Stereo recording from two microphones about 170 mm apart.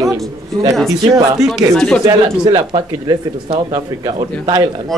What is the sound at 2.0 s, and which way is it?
Speech, 25° right (ahead or behind).